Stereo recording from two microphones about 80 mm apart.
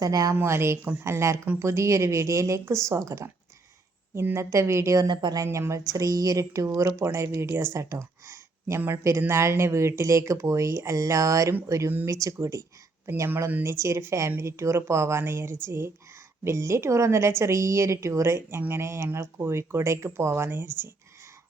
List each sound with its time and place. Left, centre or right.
0.0 s speech: right
0.3 s speech: right
5.0 s speech: right
5.3 s speech: right